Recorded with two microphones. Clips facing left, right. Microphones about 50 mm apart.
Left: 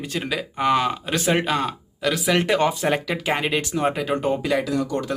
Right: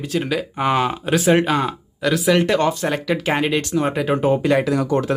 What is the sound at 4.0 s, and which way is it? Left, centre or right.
Speech, centre.